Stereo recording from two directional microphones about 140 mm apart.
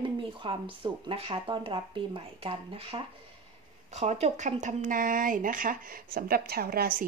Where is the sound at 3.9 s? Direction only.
55° right (ahead or behind); by 5.7 s 70° right (ahead or behind).